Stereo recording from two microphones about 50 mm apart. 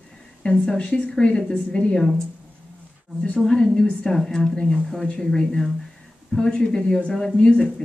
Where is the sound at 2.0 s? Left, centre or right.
Centre.